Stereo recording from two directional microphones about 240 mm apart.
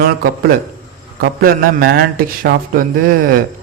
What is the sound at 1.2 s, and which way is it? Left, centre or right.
A man's voice, right.